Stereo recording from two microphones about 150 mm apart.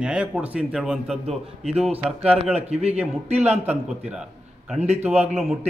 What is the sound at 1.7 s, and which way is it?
Speech, 45° right (ahead or behind).